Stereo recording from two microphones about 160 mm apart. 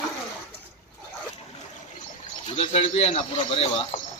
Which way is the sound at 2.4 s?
40° left (ahead or behind).